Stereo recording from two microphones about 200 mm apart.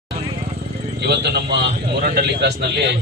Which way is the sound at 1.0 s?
55° right (ahead or behind).